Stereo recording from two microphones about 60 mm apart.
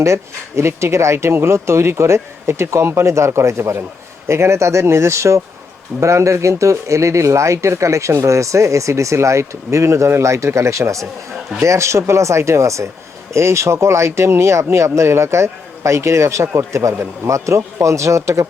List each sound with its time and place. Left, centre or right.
0.0 s speech: right